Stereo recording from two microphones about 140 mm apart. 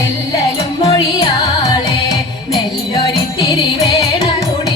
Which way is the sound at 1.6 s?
25° left (ahead or behind).